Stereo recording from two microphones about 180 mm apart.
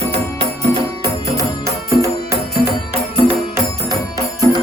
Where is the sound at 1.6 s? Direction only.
15° right (ahead or behind).